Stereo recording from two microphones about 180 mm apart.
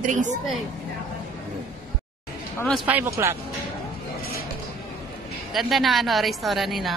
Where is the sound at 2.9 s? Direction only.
10° right (ahead or behind).